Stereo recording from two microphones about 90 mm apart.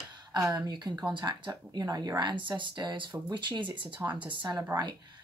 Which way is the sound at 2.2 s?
60° right (ahead or behind).